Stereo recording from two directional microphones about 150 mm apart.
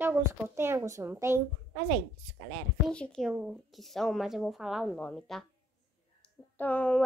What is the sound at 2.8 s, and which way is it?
Speech, 5° left (ahead or behind).